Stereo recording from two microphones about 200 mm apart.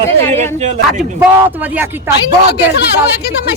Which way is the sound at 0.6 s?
35° right (ahead or behind).